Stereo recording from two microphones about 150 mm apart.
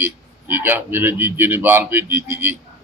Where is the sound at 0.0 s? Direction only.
15° right (ahead or behind).